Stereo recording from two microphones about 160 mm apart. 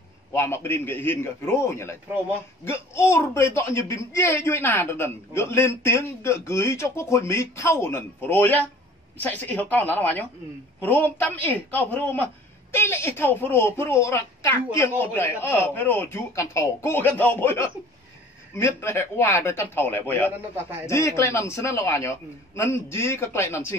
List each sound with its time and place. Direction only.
0.3 s a woman's voice: 15° left (ahead or behind)